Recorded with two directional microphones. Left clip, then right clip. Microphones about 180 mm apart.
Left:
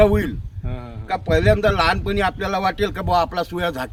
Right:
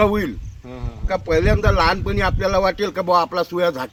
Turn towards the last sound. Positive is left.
turn(degrees=35)  # may be behind; listen again after turning